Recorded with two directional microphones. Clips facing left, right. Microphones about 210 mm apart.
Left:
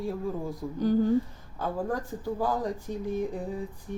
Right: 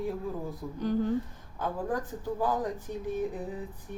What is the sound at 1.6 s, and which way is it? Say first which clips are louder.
Speech: left 1 dB; 10° left (ahead or behind).